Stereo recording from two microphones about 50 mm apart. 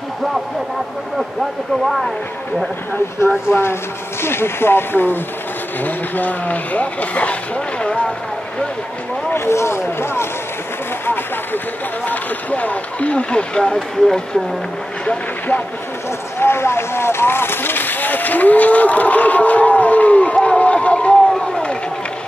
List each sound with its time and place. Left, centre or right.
1.9 s speech: centre
3.4 s speech: left
5.8 s speech: left
9.3 s speech: left
12.1 s speech: left; by 14.4 s centre
16.3 s vehicle: left
21.3 s a sound: centre